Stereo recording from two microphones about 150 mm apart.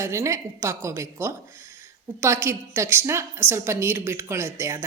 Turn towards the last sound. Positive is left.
turn(degrees=-20)  # may be behind; listen again after turning